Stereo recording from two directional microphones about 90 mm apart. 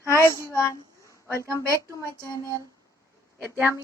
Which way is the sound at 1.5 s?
35° left (ahead or behind).